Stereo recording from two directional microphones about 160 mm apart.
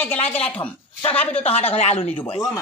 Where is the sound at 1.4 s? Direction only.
40° left (ahead or behind).